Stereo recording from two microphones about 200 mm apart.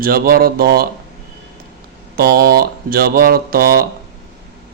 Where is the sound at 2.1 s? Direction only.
50° right (ahead or behind).